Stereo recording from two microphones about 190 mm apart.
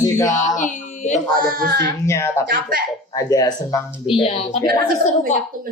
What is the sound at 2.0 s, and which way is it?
Speech, 15° left (ahead or behind).